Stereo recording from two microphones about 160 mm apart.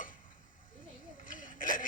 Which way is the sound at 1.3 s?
55° left (ahead or behind).